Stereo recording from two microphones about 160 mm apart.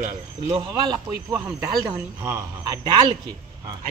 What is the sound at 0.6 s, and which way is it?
Speech, 25° right (ahead or behind).